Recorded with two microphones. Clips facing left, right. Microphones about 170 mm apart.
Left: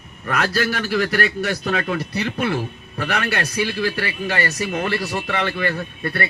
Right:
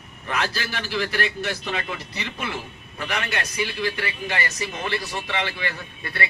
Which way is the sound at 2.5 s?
40° left (ahead or behind).